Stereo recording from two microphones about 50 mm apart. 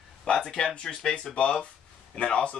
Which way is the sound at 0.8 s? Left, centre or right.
Centre.